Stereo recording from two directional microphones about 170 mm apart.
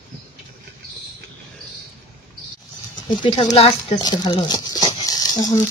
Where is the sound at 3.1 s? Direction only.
30° left (ahead or behind).